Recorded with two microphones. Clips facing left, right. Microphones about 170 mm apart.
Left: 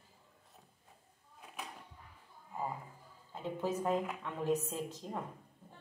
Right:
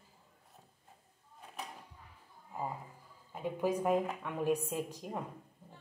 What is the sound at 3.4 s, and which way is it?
A woman's voice, 10° right (ahead or behind).